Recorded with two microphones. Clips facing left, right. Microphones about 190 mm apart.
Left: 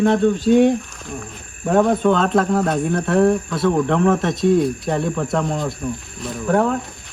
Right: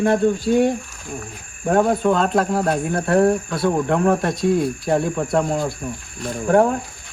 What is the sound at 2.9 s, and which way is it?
Speech, 30° right (ahead or behind).